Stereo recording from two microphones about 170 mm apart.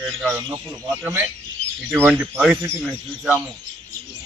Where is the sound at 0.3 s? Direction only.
15° right (ahead or behind).